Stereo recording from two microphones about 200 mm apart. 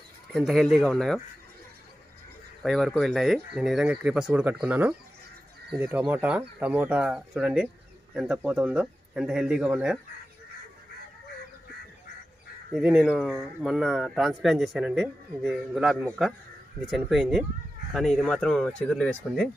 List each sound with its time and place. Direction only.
0.3 s speech: centre (ahead or behind)
2.6 s speech: centre (ahead or behind)
12.7 s speech: centre (ahead or behind)